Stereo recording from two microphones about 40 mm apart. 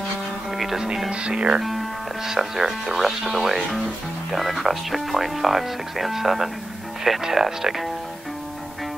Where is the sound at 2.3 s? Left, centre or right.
Centre.